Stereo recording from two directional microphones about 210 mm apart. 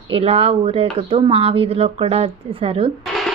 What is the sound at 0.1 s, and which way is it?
Speech, 30° right (ahead or behind).